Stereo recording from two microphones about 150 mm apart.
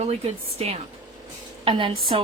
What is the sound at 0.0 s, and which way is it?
A woman's voice, 45° right (ahead or behind).